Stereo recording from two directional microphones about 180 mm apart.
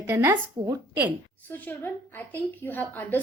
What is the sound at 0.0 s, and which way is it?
A woman's voice, 15° right (ahead or behind).